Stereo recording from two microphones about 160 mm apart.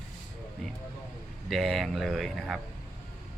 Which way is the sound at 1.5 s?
Centre (ahead or behind).